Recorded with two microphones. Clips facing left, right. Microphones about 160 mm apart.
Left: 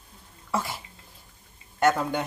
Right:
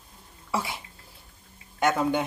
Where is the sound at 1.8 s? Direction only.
Centre (ahead or behind).